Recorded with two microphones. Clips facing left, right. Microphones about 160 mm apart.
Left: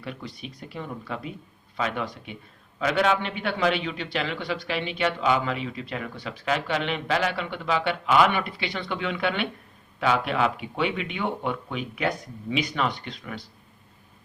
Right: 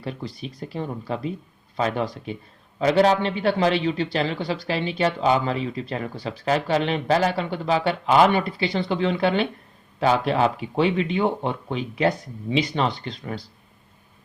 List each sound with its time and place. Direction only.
0.0 s a man's voice: 35° right (ahead or behind)